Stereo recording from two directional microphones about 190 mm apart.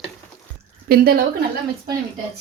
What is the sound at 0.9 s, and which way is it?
Speech, 50° right (ahead or behind).